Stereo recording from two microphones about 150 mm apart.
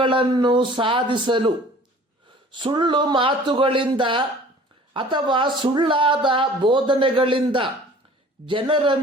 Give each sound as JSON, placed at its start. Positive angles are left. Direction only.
{"t": 0.0, "sound": "speech", "side_deg": -35}